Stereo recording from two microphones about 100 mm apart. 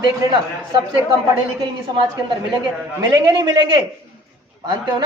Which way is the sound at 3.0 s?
45° right (ahead or behind).